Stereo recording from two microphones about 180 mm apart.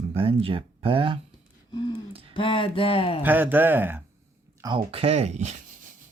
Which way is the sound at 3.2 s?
10° right (ahead or behind).